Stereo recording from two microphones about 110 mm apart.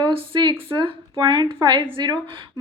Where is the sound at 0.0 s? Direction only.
55° right (ahead or behind).